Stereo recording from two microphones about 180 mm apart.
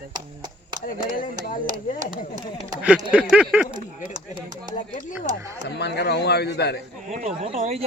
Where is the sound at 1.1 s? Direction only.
50° left (ahead or behind).